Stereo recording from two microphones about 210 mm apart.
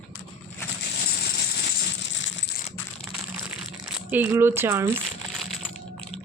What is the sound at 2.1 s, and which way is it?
Coin, 60° left (ahead or behind).